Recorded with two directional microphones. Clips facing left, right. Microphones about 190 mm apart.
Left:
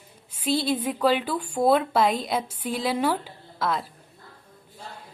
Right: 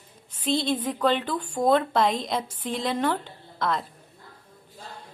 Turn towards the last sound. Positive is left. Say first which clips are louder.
# even
turn(degrees=5)  # may be behind; listen again after turning